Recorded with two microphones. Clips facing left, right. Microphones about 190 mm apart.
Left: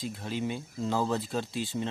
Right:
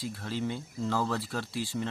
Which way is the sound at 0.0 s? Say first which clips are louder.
Even; 20° left (ahead or behind).